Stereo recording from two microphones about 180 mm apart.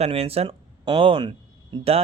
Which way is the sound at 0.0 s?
35° right (ahead or behind).